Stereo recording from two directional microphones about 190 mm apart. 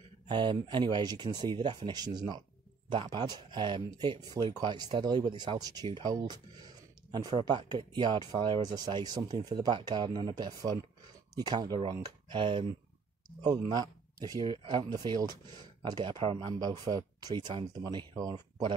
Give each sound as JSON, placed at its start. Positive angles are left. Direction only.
{"t": 0.3, "sound": "speech", "side_deg": -25}